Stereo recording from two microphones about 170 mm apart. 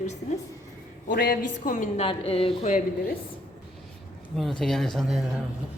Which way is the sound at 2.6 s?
45° left (ahead or behind).